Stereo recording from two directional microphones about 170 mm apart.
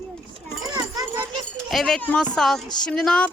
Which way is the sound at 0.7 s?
20° right (ahead or behind).